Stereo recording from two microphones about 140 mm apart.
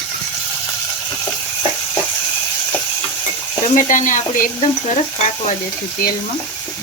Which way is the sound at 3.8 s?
70° left (ahead or behind).